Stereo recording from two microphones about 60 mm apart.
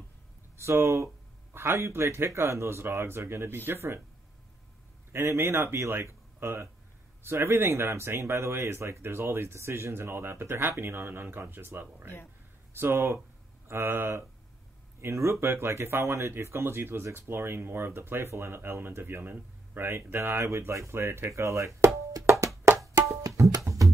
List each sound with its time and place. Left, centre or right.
0.6 s speech: right
5.1 s speech: right
12.7 s speech: right
21.3 s speech: right
22.1 s music: right
22.8 s music: right